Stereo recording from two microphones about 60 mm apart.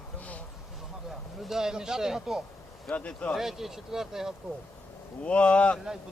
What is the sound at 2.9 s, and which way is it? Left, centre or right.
Speech, left.